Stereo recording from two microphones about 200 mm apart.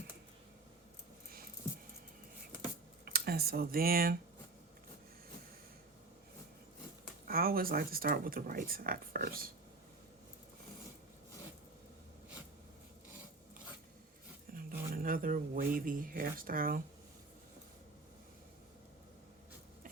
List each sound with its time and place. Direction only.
3.0 s speech: 50° right (ahead or behind)
7.3 s speech: 50° right (ahead or behind)
14.5 s speech: 45° right (ahead or behind)